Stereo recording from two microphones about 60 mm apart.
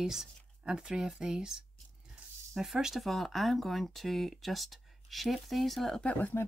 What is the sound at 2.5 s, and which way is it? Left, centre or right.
Speech, centre.